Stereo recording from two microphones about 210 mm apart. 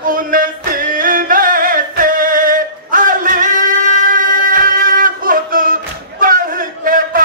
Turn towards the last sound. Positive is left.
turn(degrees=-40)  # may be behind; listen again after turning